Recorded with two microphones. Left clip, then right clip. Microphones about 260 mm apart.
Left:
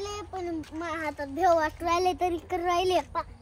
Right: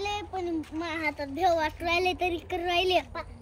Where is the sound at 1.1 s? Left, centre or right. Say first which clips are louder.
Left 2 dB; left.